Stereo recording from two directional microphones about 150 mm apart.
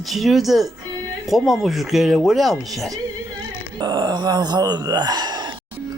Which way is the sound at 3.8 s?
30° right (ahead or behind).